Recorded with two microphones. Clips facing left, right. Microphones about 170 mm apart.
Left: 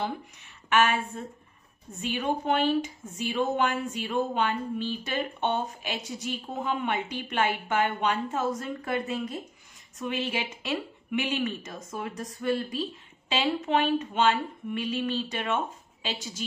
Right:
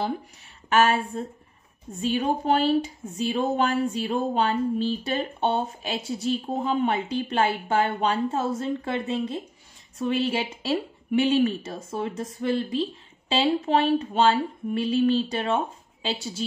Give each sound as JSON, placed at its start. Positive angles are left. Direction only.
{"t": 0.7, "sound": "speech", "side_deg": -35}